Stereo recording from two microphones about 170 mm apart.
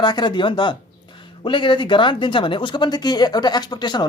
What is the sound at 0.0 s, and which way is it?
Speech, 25° left (ahead or behind).